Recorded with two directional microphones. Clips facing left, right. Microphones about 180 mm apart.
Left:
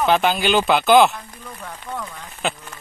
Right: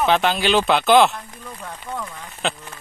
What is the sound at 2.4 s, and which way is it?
Speech, centre (ahead or behind).